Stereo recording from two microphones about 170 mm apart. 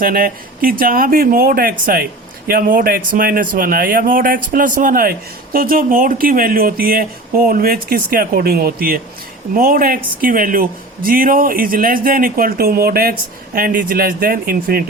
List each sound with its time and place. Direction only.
0.0 s speech: 55° right (ahead or behind)